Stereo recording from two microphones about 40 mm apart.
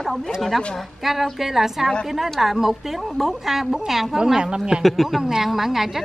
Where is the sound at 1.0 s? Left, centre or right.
Centre.